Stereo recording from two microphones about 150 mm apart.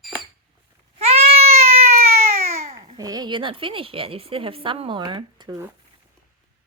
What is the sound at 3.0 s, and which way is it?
A woman's voice, 25° right (ahead or behind).